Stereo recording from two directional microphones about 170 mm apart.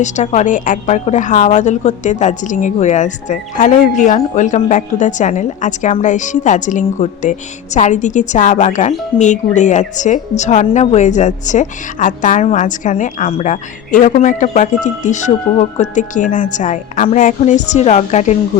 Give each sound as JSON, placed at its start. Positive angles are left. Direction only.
{"t": 0.0, "sound": "a woman's voice", "side_deg": 45}